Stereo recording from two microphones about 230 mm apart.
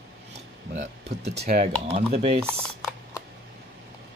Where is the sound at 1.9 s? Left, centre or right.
Right.